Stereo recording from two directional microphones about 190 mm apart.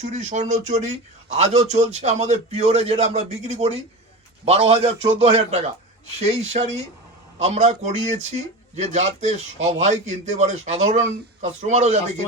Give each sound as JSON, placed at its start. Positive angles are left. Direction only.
{"t": 0.0, "sound": "a man's voice", "side_deg": -35}